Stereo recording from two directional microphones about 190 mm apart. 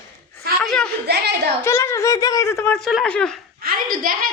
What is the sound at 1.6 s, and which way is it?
Speech, 15° left (ahead or behind).